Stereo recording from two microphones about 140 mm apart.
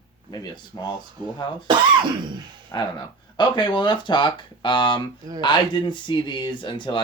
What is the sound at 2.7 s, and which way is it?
Speech, 30° left (ahead or behind).